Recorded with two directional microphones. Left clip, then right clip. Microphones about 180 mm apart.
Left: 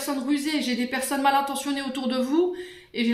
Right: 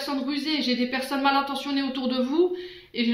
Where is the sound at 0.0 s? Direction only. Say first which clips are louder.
Left 2 dB; 40° left (ahead or behind).